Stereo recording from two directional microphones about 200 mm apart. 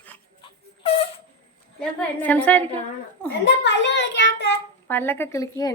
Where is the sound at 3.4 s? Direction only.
65° left (ahead or behind).